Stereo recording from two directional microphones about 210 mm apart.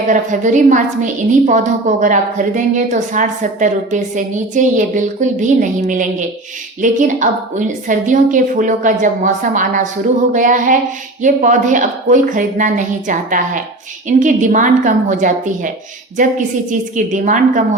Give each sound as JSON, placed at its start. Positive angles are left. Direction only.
{"t": 0.1, "sound": "a woman's voice", "side_deg": -35}